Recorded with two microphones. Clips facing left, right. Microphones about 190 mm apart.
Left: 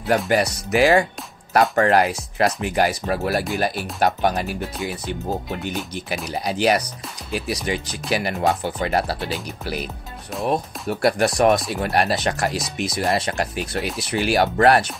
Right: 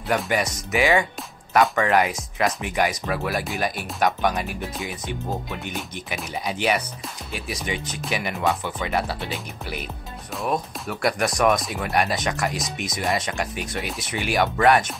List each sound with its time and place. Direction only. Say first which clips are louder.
0.3 s speech: left 5 dB; 35° left (ahead or behind)
6.6 s speech: left 5 dB; 40° left (ahead or behind)
10.4 s speech: left 3 dB; 30° left (ahead or behind)